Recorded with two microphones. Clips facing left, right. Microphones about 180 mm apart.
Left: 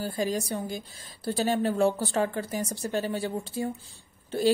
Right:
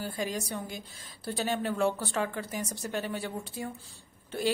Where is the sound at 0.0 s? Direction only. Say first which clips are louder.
Left 5 dB; 35° left (ahead or behind).